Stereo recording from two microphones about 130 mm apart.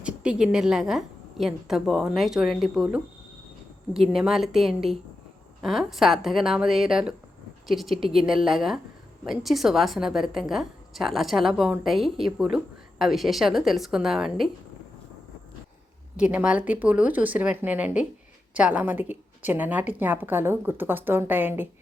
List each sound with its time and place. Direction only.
0.0 s a woman's voice: 10° right (ahead or behind)
16.1 s a woman's voice: 10° right (ahead or behind)